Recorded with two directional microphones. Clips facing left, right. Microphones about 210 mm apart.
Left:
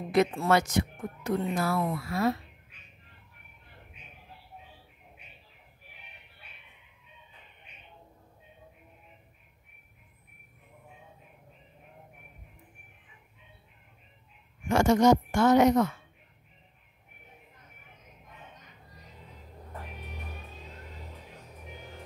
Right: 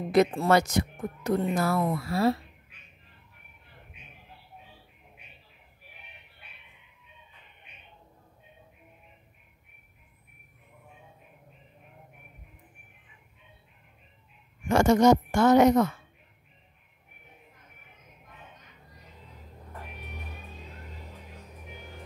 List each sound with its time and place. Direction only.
0.1 s speech: 35° right (ahead or behind)
14.7 s speech: 45° right (ahead or behind)